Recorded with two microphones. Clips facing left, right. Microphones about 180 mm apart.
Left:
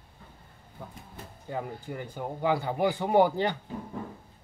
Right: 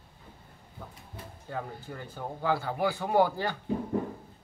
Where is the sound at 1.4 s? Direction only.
15° left (ahead or behind).